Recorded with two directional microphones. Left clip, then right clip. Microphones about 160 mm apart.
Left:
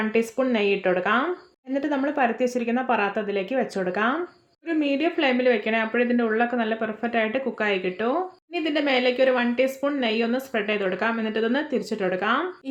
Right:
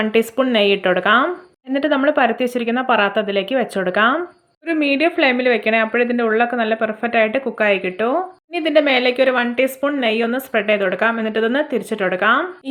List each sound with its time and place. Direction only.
0.0 s a woman's voice: 30° right (ahead or behind)